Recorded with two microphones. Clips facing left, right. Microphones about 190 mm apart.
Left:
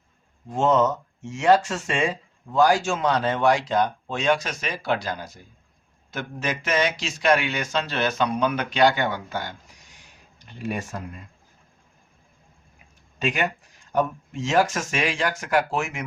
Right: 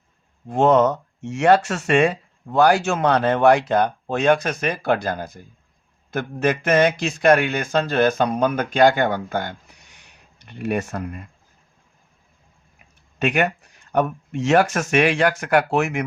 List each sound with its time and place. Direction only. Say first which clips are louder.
0.4 s speech: right 4 dB; 60° right (ahead or behind)
13.1 s speech: right 5 dB; 65° right (ahead or behind)